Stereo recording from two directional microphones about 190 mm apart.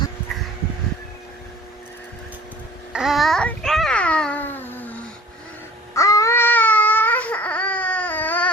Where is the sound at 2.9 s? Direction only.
Centre (ahead or behind).